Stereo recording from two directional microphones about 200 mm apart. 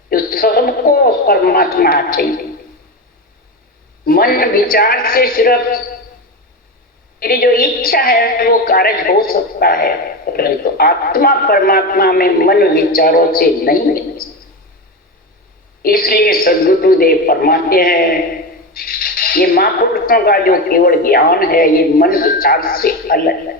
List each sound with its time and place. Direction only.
0.1 s a sound: 45° left (ahead or behind)
4.0 s a woman's voice: 45° left (ahead or behind)
7.2 s a woman's voice: 45° left (ahead or behind)
15.8 s a woman's voice: 45° left (ahead or behind)